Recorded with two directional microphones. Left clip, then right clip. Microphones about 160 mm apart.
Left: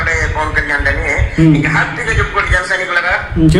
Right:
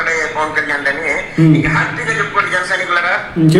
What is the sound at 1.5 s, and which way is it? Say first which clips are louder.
Speech: left 1 dB; 20° left (ahead or behind).